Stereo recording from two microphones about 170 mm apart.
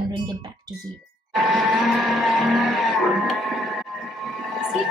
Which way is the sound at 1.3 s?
Centre (ahead or behind).